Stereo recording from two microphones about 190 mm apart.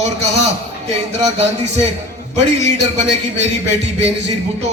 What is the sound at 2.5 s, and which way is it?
A man's voice, 35° right (ahead or behind).